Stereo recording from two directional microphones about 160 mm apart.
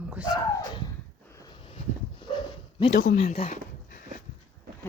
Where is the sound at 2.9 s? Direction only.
65° left (ahead or behind).